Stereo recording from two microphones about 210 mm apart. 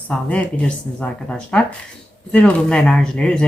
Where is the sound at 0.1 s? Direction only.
5° left (ahead or behind).